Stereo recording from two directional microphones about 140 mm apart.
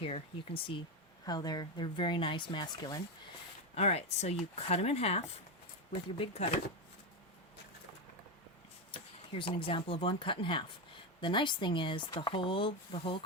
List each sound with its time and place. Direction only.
0.0 s speech: 40° left (ahead or behind)
1.2 s speech: 30° left (ahead or behind)
3.8 s speech: 50° left (ahead or behind)
9.5 s speech: 40° left (ahead or behind)